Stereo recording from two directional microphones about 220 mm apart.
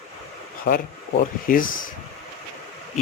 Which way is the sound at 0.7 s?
45° left (ahead or behind).